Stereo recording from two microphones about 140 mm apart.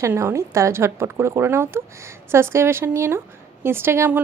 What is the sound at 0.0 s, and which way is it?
A woman's voice, 20° right (ahead or behind).